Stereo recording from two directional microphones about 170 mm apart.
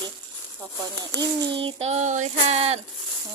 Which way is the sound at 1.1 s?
25° right (ahead or behind).